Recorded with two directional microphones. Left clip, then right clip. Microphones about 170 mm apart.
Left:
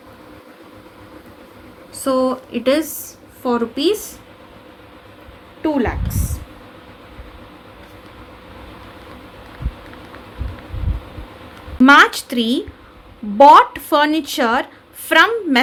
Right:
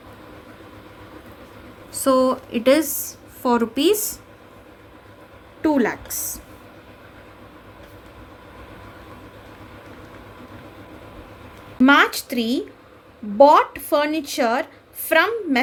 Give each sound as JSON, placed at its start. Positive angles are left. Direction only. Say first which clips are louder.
{"t": 1.9, "sound": "a woman's voice", "louder": "even", "side_deg": -45}
{"t": 5.6, "sound": "a woman's voice", "louder": "even", "side_deg": -45}
{"t": 11.8, "sound": "a woman's voice", "louder": "left 6 dB", "side_deg": 5}